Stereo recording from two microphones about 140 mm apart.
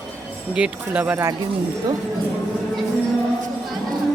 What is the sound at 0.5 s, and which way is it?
Speech, 10° right (ahead or behind).